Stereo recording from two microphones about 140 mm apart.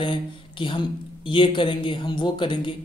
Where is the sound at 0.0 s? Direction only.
35° left (ahead or behind).